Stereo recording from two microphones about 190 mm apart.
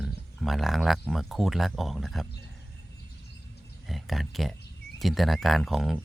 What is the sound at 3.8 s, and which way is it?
Speech, centre (ahead or behind).